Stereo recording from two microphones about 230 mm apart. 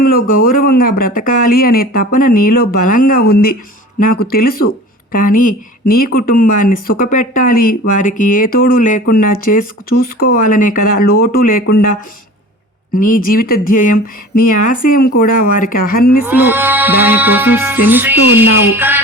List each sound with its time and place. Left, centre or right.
0.0 s speech: left
16.2 s music: centre